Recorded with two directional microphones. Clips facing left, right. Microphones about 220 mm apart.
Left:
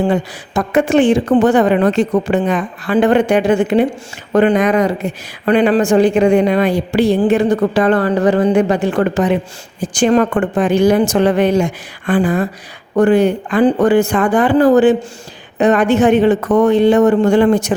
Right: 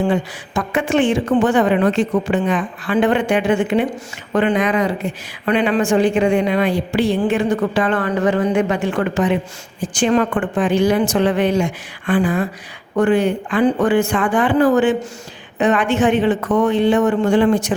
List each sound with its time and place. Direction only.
0.1 s speech: 40° left (ahead or behind)